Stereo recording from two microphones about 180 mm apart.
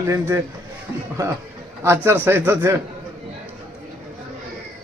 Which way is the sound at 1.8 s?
15° right (ahead or behind).